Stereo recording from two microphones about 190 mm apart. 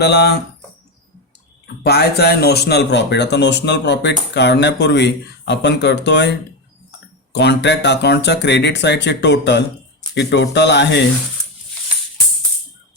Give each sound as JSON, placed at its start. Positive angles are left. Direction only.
{"t": 0.0, "sound": "speech", "side_deg": 60}
{"t": 1.8, "sound": "speech", "side_deg": 60}
{"t": 7.3, "sound": "speech", "side_deg": 65}